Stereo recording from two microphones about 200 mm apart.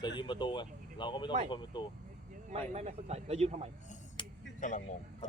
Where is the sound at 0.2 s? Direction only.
25° left (ahead or behind).